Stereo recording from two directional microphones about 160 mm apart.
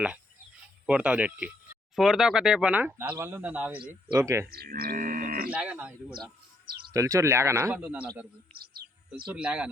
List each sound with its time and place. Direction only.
0.9 s speech: 5° right (ahead or behind)
4.4 s music: 75° right (ahead or behind)
5.5 s speech: 5° right (ahead or behind)
6.9 s speech: 20° right (ahead or behind)
8.5 s bird: 75° right (ahead or behind)
9.2 s speech: 5° right (ahead or behind)